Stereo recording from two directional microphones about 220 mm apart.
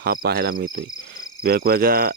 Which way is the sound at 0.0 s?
45° right (ahead or behind).